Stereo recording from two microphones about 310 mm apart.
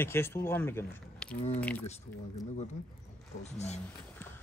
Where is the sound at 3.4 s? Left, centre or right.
Left.